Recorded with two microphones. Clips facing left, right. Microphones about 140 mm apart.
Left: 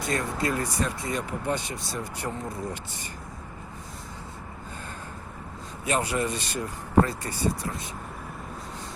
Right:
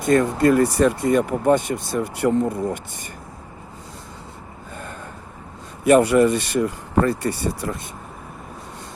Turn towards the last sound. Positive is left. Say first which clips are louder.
# right 5 dB
turn(degrees=-65)  # may be behind; listen again after turning